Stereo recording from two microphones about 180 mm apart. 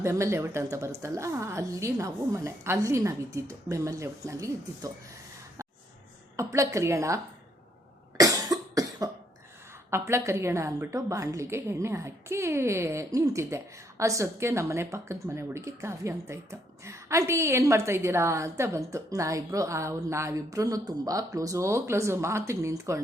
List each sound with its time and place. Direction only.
0.0 s a woman's voice: 15° right (ahead or behind)
6.3 s a woman's voice: 15° right (ahead or behind)
8.2 s cough: 20° right (ahead or behind)
9.9 s a woman's voice: 15° right (ahead or behind)